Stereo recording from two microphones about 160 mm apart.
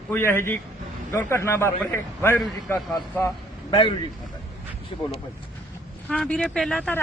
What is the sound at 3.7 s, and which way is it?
Speech, 30° left (ahead or behind).